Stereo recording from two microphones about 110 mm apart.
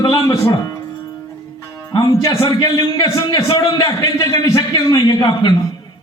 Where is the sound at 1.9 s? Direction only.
30° left (ahead or behind).